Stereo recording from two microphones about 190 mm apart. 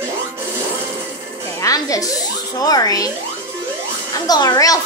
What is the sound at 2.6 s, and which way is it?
Speech, 20° left (ahead or behind).